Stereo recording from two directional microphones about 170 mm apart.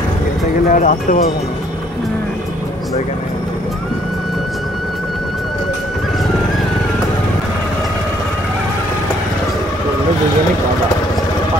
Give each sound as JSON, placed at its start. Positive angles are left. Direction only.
{"t": 0.7, "sound": "speech", "side_deg": 50}